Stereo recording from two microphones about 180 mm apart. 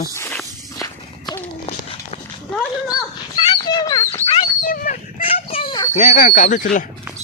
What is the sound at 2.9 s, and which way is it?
Dog, 25° left (ahead or behind).